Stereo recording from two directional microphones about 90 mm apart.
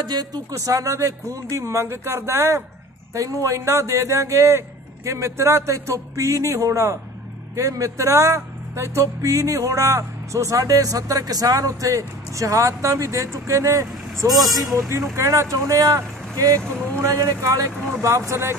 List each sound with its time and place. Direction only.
0.0 s speech: 50° right (ahead or behind); by 18.6 s 30° right (ahead or behind)